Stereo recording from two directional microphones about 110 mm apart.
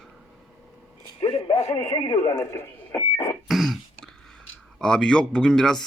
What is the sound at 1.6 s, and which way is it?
Speech, 35° left (ahead or behind).